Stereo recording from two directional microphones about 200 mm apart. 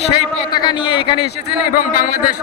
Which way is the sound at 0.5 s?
25° left (ahead or behind).